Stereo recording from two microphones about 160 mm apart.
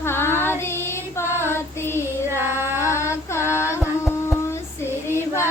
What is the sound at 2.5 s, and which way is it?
Female singing, 15° right (ahead or behind).